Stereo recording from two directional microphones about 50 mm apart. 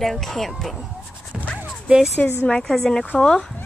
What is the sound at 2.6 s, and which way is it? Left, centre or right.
Speech, centre.